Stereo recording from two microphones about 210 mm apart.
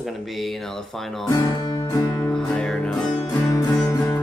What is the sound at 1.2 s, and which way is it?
Music, 15° left (ahead or behind).